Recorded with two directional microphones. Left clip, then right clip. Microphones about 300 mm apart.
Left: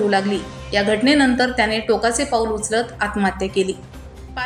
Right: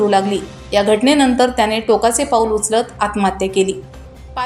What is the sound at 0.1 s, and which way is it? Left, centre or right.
A woman's voice, centre.